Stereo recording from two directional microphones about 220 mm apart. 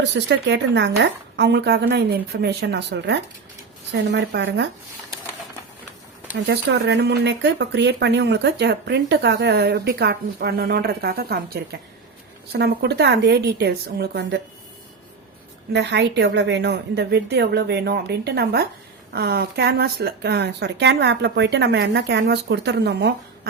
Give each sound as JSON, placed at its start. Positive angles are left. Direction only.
{"t": 0.0, "sound": "speech", "side_deg": -55}
{"t": 6.5, "sound": "speech", "side_deg": -50}
{"t": 15.7, "sound": "speech", "side_deg": -50}